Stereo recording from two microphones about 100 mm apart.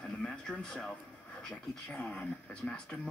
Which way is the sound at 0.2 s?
5° left (ahead or behind).